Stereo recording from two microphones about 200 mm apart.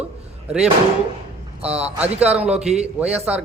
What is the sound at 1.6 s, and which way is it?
Speech, 30° right (ahead or behind).